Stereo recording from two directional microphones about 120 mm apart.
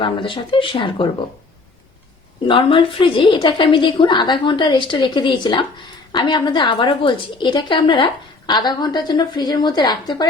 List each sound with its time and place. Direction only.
0.0 s a woman's voice: 45° left (ahead or behind)
2.5 s a woman's voice: 45° left (ahead or behind)